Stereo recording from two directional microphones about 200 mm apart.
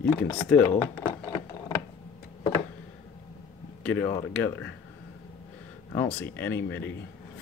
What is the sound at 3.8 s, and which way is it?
Speech, 5° left (ahead or behind).